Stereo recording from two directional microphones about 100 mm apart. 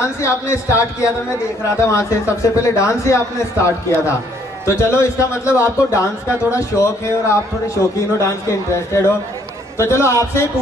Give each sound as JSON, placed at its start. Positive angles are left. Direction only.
{"t": 0.0, "sound": "a man's voice", "side_deg": 30}